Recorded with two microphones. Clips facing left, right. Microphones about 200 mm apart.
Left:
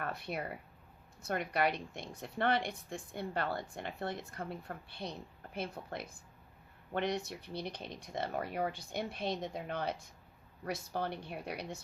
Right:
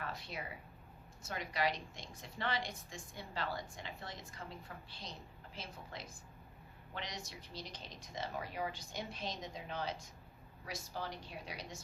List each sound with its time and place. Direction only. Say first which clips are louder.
0.0 s a woman's voice: left 6 dB; 55° left (ahead or behind)